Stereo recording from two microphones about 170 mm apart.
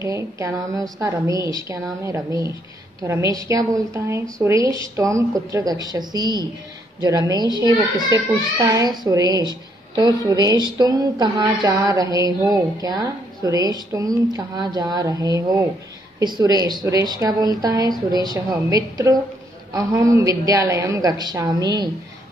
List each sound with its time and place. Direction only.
0.0 s a woman's voice: 15° right (ahead or behind)